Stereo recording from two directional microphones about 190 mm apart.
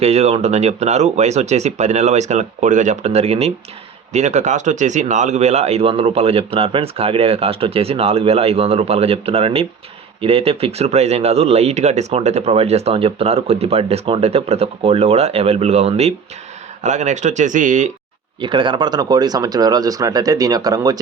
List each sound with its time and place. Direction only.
0.0 s speech: 35° right (ahead or behind)
18.3 s speech: 25° right (ahead or behind)